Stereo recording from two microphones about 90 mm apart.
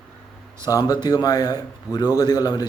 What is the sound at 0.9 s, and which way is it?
A man's voice, 50° left (ahead or behind).